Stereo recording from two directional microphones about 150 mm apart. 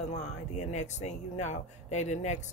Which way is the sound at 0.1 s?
50° left (ahead or behind).